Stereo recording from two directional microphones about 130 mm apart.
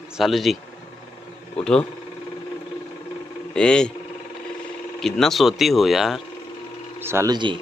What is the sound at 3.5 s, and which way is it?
Speech, 5° left (ahead or behind).